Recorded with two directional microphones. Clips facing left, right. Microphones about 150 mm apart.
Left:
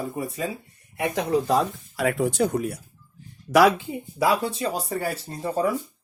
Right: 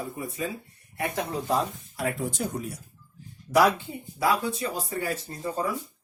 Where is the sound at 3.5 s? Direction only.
90° left.